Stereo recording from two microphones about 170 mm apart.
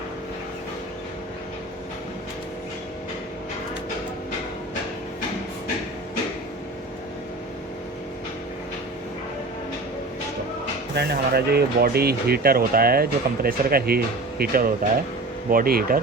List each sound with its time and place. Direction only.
10.9 s speech: 70° right (ahead or behind)